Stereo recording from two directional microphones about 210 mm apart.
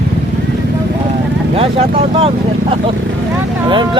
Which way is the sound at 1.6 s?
25° right (ahead or behind).